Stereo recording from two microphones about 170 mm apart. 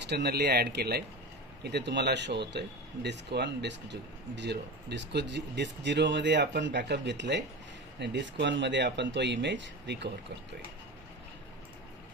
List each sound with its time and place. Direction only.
0.1 s speech: 80° right